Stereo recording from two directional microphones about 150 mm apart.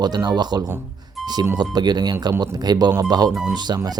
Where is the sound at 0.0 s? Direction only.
25° right (ahead or behind).